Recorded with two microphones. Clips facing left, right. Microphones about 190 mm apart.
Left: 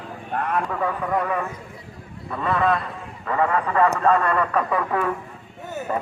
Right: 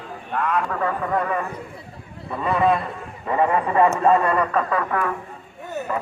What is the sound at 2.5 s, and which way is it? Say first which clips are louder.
A man's voice: right 2 dB; 20° right (ahead or behind).